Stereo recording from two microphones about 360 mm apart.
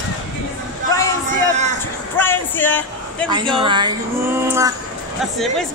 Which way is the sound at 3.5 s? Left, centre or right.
Centre.